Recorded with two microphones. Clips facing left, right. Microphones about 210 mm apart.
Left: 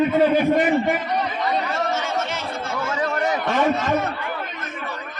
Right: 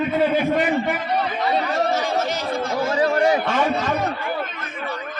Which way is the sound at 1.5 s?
35° right (ahead or behind).